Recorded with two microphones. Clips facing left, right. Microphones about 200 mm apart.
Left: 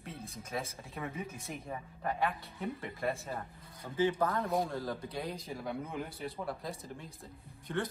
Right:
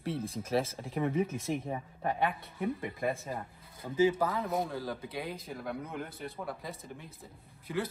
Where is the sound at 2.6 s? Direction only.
15° right (ahead or behind).